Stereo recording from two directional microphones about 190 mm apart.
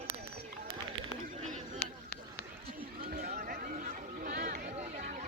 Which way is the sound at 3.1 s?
50° right (ahead or behind).